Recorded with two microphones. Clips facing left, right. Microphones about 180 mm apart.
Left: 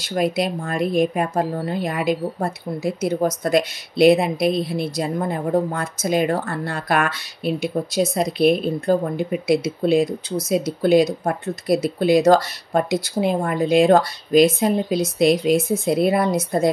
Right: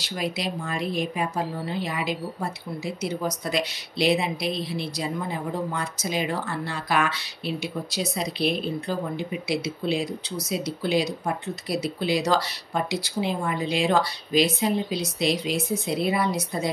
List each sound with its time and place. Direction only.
0.0 s speech: 50° left (ahead or behind)